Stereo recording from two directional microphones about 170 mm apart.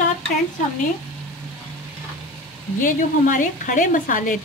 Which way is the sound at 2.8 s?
50° left (ahead or behind).